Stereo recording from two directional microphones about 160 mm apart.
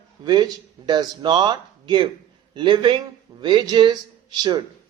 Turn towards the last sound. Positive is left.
turn(degrees=-25)  # may be behind; listen again after turning